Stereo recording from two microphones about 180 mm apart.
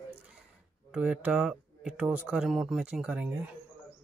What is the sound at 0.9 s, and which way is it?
Speech, 5° right (ahead or behind).